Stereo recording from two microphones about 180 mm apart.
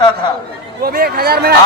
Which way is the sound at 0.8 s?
55° right (ahead or behind).